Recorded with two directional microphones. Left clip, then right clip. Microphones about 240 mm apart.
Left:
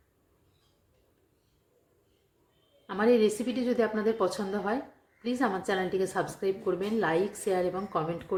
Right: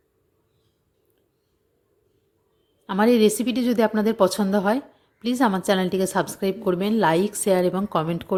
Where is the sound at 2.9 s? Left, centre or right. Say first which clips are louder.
Right 6 dB; right.